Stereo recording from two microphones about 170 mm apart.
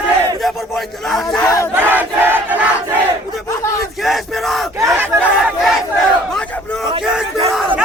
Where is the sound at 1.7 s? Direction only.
10° right (ahead or behind).